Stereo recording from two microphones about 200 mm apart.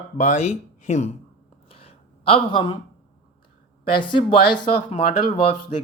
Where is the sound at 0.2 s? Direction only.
35° left (ahead or behind).